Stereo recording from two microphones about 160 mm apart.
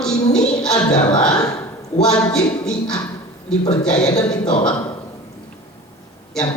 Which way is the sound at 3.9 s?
25° left (ahead or behind).